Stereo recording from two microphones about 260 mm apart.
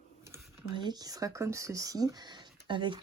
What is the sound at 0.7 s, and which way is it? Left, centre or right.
Speech, centre.